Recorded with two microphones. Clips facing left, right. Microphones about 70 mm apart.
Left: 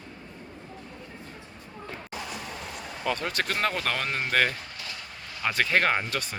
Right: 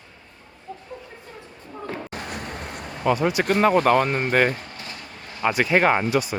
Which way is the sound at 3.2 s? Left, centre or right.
Centre.